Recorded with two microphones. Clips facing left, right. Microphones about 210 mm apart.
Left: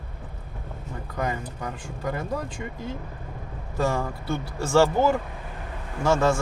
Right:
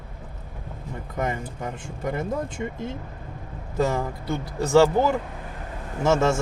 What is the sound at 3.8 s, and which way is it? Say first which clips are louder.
Speech: right 2 dB; 20° right (ahead or behind).